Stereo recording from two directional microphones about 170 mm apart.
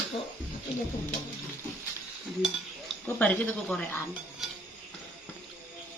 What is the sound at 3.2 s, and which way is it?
Speech, 10° left (ahead or behind).